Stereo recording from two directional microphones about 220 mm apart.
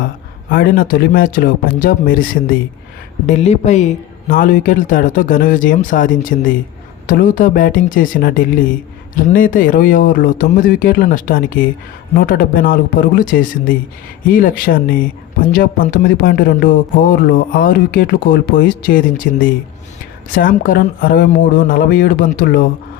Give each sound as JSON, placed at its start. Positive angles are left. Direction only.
{"t": 0.5, "sound": "speech", "side_deg": 40}
{"t": 3.2, "sound": "speech", "side_deg": 30}